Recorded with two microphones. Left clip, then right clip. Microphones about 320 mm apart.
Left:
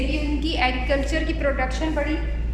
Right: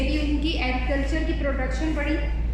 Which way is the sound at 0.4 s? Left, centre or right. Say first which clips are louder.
Left 4 dB; left.